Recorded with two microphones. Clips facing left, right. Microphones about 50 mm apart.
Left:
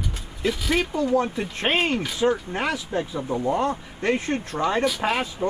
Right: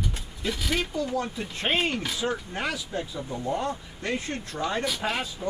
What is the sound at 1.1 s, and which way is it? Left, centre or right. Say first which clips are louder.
Speech: left 7 dB; left.